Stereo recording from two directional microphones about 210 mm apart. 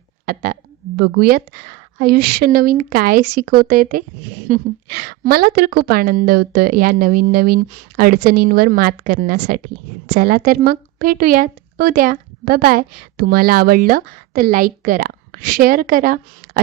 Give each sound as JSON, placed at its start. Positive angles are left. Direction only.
{"t": 0.9, "sound": "speech", "side_deg": -45}